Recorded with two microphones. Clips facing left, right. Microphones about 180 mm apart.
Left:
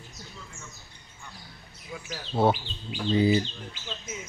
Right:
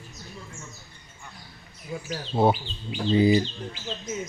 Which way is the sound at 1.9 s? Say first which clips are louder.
Right 6 dB; 35° right (ahead or behind).